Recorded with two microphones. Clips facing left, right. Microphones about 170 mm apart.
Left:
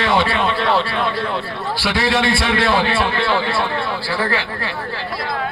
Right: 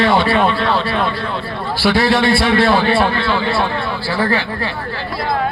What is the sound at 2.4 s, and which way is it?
Speech, 45° right (ahead or behind).